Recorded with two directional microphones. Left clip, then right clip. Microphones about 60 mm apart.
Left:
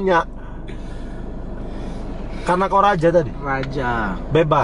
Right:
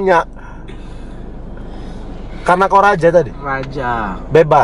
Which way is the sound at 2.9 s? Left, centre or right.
Centre.